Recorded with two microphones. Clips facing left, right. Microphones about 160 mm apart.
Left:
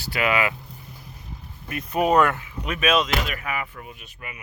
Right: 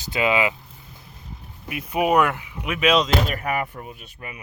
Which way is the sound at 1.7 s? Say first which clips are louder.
Even; 10° right (ahead or behind).